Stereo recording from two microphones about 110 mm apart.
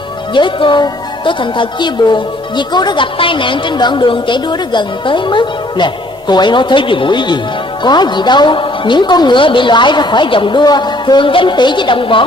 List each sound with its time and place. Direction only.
0.3 s speech: 45° left (ahead or behind)